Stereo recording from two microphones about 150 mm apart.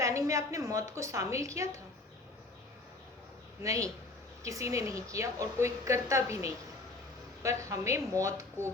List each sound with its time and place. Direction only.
0.0 s a woman's voice: 20° right (ahead or behind)
3.6 s a woman's voice: 20° right (ahead or behind)